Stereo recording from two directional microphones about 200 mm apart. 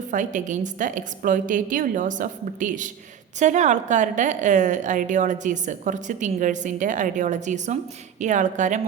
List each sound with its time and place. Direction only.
0.1 s a woman's voice: 40° right (ahead or behind)